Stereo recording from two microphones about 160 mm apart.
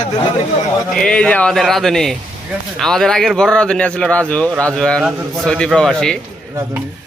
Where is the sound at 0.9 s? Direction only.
5° left (ahead or behind).